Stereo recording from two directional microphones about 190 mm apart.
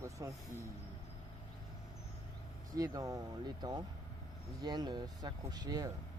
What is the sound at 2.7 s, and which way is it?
Speech, 20° right (ahead or behind).